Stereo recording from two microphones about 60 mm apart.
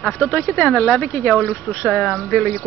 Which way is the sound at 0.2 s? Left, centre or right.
Left.